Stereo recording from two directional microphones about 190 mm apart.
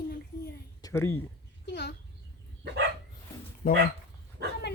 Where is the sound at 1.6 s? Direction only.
65° left (ahead or behind).